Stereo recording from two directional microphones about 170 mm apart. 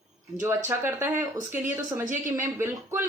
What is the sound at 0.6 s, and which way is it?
A woman's voice, 15° right (ahead or behind).